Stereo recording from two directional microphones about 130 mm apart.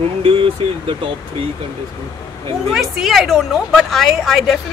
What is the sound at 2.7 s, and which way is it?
A woman's voice, 5° right (ahead or behind).